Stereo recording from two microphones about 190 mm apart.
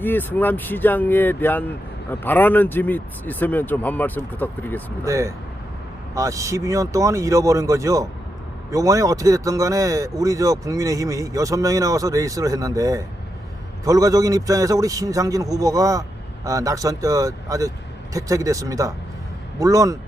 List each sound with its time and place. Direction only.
0.0 s speech: 10° left (ahead or behind)
5.0 s speech: 15° right (ahead or behind)